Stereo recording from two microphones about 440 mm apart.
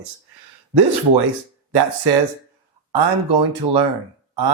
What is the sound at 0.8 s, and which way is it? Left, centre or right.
Speech, right.